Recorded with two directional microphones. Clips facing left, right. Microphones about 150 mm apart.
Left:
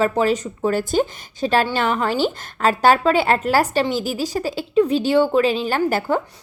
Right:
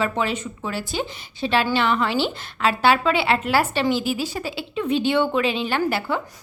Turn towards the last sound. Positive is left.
turn(degrees=45)  # may be behind; listen again after turning